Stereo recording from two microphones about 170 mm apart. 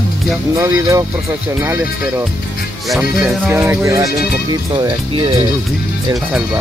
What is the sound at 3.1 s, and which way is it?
Speech, 5° right (ahead or behind).